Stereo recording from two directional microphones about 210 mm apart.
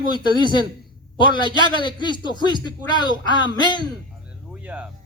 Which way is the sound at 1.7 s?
20° left (ahead or behind).